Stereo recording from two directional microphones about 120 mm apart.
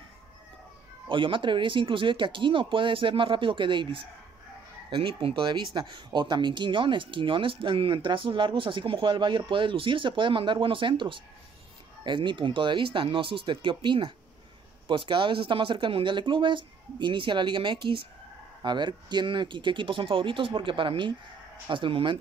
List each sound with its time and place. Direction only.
1.0 s speech: 45° right (ahead or behind)